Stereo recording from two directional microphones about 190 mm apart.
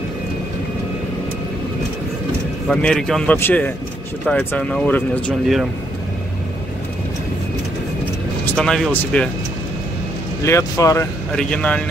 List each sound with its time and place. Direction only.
2.7 s a man's voice: 5° left (ahead or behind)
8.5 s speech: 5° left (ahead or behind)
10.4 s a man's voice: 15° left (ahead or behind)
11.3 s speech: 5° left (ahead or behind)